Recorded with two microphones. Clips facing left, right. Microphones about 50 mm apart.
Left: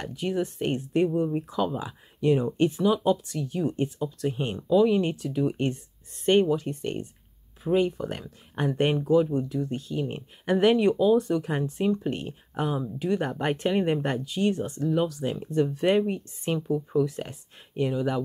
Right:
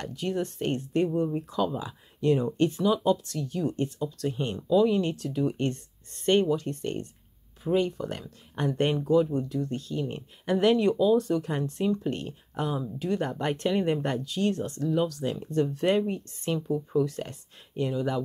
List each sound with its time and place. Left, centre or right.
0.0 s speech: centre